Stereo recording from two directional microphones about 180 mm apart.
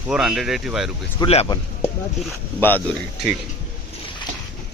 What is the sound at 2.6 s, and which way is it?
Speech, 10° left (ahead or behind).